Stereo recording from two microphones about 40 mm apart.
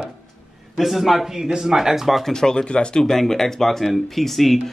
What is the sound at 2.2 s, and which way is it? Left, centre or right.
Speech, centre.